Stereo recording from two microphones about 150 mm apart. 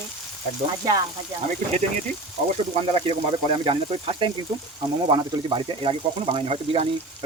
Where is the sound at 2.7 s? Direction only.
35° right (ahead or behind).